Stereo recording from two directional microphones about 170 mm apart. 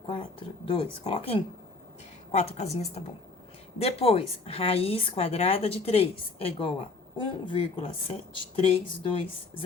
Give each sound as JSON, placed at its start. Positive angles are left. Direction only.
{"t": 0.1, "sound": "a woman's voice", "side_deg": 30}
{"t": 2.3, "sound": "a woman's voice", "side_deg": 40}